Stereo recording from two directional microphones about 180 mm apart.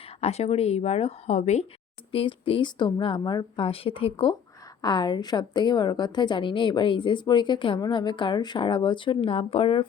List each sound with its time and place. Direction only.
0.2 s a woman's voice: 35° left (ahead or behind)